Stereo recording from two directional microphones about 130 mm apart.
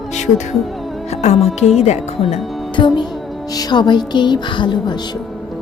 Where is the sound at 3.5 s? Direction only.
35° left (ahead or behind).